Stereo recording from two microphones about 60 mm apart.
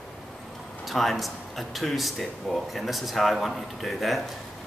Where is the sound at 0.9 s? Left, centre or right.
Centre.